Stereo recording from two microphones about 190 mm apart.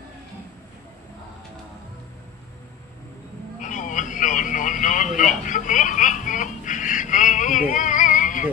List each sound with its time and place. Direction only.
3.6 s radio: 40° left (ahead or behind)